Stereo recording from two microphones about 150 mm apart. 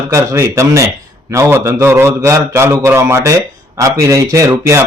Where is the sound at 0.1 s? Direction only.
20° right (ahead or behind).